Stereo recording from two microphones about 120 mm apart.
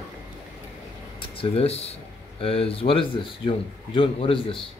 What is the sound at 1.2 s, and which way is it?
Speech, 50° left (ahead or behind).